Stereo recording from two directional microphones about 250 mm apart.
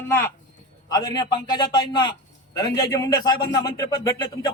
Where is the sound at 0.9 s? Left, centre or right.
Centre.